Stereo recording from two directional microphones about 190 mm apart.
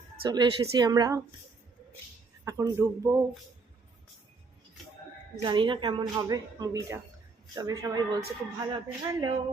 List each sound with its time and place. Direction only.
0.2 s speech: 20° right (ahead or behind)
2.4 s a man's voice: 15° right (ahead or behind)
5.4 s speech: 25° right (ahead or behind)